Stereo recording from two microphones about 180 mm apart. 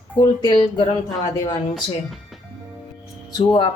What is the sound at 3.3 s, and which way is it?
Speech, 25° left (ahead or behind).